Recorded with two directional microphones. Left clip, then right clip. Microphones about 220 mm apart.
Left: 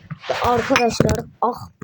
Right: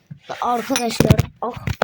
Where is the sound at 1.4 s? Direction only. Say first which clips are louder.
Left 6 dB; 10° left (ahead or behind).